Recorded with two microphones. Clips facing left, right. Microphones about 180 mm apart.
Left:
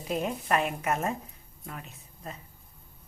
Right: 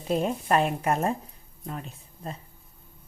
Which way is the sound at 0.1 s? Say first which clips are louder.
Right 4 dB; 30° right (ahead or behind).